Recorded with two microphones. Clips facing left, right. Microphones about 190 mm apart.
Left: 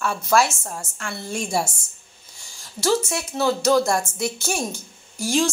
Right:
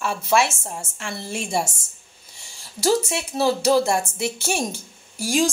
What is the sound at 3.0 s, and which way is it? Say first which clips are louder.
A woman's voice: right 1 dB; 30° right (ahead or behind).